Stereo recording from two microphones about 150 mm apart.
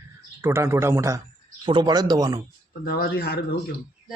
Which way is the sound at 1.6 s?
30° right (ahead or behind).